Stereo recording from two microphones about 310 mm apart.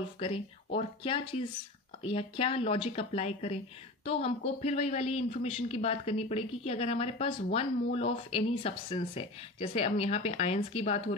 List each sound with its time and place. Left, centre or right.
0.2 s a woman's voice: centre